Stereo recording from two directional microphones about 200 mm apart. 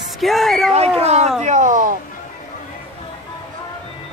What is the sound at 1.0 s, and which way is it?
Speech, 35° right (ahead or behind).